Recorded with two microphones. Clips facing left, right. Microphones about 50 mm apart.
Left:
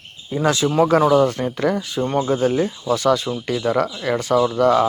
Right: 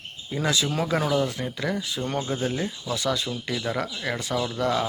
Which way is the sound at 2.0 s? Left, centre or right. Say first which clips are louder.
Left 9 dB; centre.